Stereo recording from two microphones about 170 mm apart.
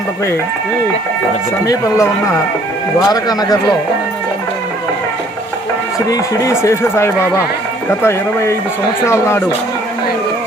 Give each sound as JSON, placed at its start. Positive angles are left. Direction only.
{"t": 1.6, "sound": "speech", "side_deg": 20}
{"t": 6.1, "sound": "speech", "side_deg": 20}